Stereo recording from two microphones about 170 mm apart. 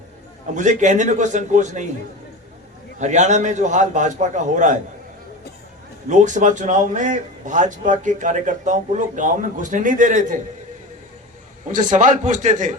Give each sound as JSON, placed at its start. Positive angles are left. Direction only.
{"t": 0.5, "sound": "a man's voice", "side_deg": -45}
{"t": 3.0, "sound": "a man's voice", "side_deg": -45}
{"t": 6.1, "sound": "a man's voice", "side_deg": -45}
{"t": 11.7, "sound": "a man's voice", "side_deg": -50}